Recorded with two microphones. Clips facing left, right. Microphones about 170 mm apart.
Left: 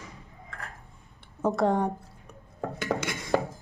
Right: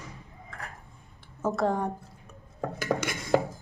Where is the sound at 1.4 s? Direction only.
15° left (ahead or behind).